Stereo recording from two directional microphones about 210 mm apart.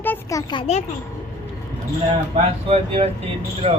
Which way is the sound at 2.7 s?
25° right (ahead or behind).